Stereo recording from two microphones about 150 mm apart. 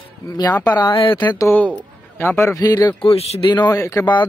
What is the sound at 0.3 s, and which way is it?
Speech, 25° left (ahead or behind).